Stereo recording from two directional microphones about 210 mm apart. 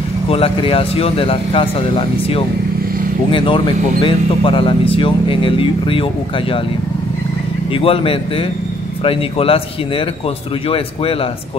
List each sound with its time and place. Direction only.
0.3 s speech: 25° left (ahead or behind)
7.7 s speech: 25° left (ahead or behind)